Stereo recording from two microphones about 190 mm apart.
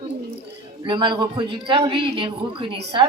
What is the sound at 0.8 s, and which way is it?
A man's voice, 25° right (ahead or behind).